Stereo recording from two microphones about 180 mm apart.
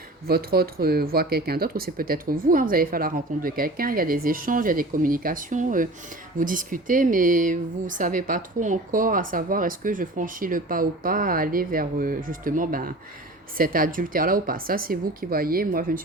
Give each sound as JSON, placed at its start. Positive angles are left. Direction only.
{"t": 0.3, "sound": "a woman's voice", "side_deg": -60}